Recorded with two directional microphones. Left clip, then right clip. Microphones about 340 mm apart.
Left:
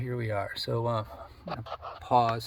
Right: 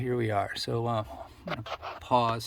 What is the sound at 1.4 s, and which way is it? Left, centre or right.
Dog, right.